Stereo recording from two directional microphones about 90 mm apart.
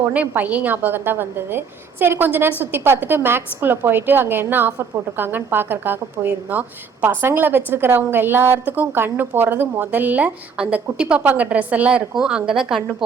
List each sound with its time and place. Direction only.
0.1 s a woman's voice: 15° right (ahead or behind)